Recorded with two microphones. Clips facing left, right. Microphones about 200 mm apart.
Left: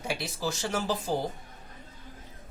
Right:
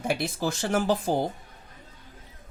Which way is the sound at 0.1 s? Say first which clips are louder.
Right 4 dB; 55° right (ahead or behind).